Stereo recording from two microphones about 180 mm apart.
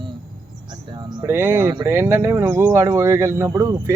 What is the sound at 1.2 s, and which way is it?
Speech, 10° right (ahead or behind).